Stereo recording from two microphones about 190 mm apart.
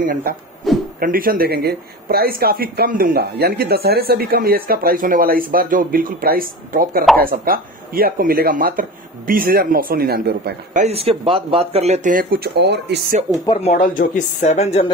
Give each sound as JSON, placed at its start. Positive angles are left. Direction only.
{"t": 0.0, "sound": "speech", "side_deg": -45}
{"t": 13.6, "sound": "speech", "side_deg": 40}